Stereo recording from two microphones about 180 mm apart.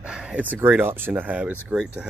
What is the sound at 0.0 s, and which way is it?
Speech, 5° right (ahead or behind).